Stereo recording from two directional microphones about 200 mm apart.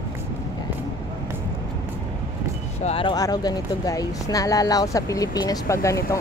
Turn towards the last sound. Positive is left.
turn(degrees=15)  # may be behind; listen again after turning